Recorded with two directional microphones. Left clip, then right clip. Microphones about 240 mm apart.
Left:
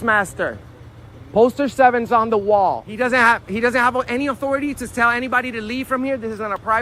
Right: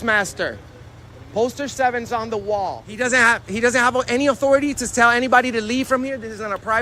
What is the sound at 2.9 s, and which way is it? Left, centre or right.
Speech, centre.